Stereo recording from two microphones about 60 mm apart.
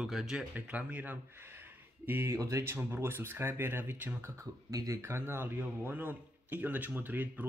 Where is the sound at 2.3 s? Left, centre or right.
Right.